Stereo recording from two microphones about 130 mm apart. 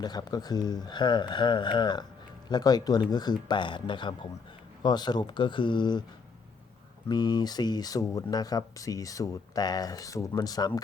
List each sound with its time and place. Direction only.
0.0 s speech: 30° left (ahead or behind)
7.1 s speech: 35° left (ahead or behind)